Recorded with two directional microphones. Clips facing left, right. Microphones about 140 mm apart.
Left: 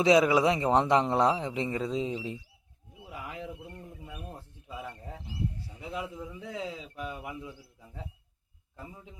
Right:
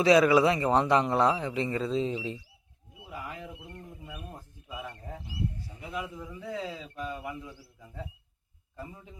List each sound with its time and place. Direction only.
0.0 s a man's voice: 20° left (ahead or behind)
3.1 s wild animals: 20° left (ahead or behind)
6.5 s speech: 15° left (ahead or behind)